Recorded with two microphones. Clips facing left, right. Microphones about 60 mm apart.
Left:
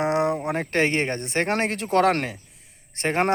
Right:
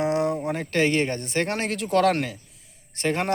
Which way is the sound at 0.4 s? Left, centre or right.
Left.